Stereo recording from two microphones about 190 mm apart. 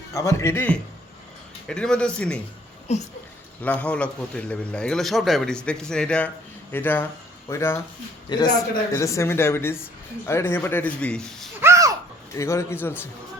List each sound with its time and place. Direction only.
0.1 s a man's voice: 15° left (ahead or behind)
2.9 s speech: 35° left (ahead or behind)
3.6 s a man's voice: 5° left (ahead or behind)
11.6 s a sound: 15° right (ahead or behind)
12.3 s speech: 15° left (ahead or behind)